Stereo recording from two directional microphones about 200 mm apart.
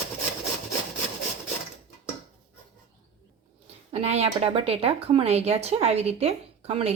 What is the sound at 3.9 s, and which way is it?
Speech, 30° right (ahead or behind).